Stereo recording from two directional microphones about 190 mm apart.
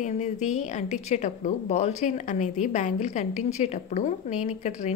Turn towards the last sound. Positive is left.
turn(degrees=40)  # may be behind; listen again after turning